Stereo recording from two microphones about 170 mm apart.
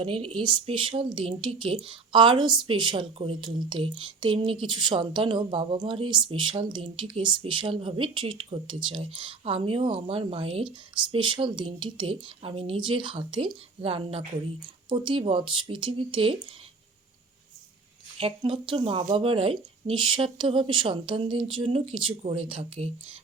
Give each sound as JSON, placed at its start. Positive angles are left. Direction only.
{"t": 0.0, "sound": "a woman's voice", "side_deg": -30}
{"t": 18.2, "sound": "a woman's voice", "side_deg": -30}